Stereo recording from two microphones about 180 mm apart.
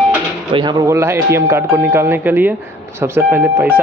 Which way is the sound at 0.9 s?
15° right (ahead or behind).